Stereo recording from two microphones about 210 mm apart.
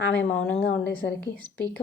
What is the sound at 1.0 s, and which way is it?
Speech, 55° left (ahead or behind).